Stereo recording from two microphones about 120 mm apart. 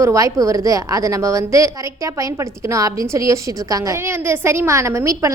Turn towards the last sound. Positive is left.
turn(degrees=-25)  # may be behind; listen again after turning